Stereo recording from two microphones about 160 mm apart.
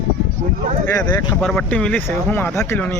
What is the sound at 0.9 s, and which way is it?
Speech, 20° left (ahead or behind).